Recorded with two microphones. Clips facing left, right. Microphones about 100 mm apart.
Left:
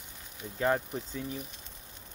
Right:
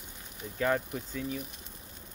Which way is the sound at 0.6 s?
20° left (ahead or behind).